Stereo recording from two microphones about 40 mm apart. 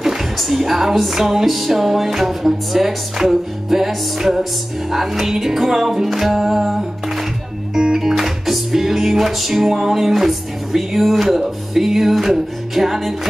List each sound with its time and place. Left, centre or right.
0.0 s music: centre